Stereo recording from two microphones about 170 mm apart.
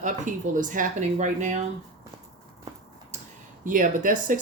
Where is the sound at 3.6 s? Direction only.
50° right (ahead or behind).